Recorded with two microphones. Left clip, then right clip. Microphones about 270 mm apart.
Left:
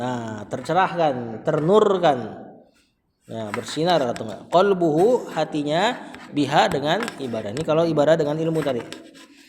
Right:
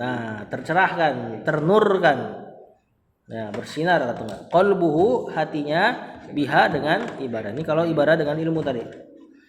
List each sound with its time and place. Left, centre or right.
0.0 s speech: left
3.3 s speech: left